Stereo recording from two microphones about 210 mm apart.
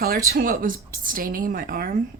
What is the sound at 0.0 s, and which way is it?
A woman's voice, 45° right (ahead or behind).